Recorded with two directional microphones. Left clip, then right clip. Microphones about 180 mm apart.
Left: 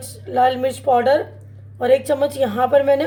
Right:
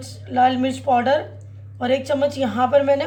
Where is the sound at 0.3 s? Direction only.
60° left (ahead or behind).